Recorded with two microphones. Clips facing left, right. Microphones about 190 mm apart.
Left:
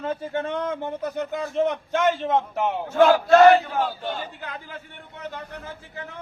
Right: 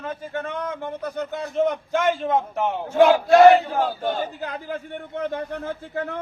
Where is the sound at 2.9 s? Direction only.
15° right (ahead or behind).